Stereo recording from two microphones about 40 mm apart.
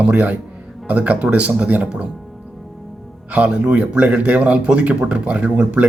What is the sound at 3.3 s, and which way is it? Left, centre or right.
A man's voice, right.